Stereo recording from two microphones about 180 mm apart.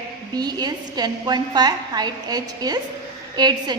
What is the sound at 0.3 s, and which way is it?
A woman's voice, 25° right (ahead or behind).